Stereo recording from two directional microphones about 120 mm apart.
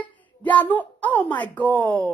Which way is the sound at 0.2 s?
15° left (ahead or behind).